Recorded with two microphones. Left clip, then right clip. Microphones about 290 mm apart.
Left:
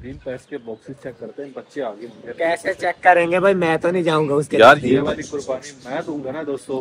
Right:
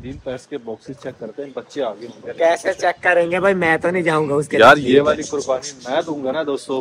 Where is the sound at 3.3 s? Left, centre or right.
Centre.